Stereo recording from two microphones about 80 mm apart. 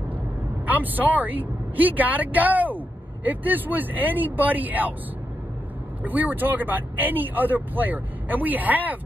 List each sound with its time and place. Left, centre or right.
0.7 s speech: right
6.0 s speech: right